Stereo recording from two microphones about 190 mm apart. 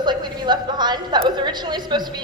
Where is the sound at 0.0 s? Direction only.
25° right (ahead or behind).